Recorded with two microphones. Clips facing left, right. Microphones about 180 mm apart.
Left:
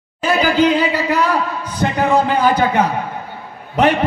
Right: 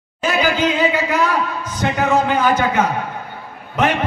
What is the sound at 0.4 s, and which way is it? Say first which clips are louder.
A man's voice: left 3 dB; 35° left (ahead or behind).